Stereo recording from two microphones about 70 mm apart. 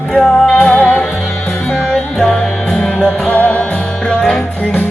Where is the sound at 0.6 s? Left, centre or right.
Left.